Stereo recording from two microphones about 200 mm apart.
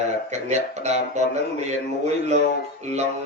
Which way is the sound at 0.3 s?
35° right (ahead or behind).